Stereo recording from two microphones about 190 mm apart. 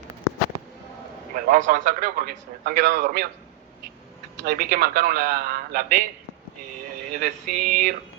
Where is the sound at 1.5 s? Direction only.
45° right (ahead or behind).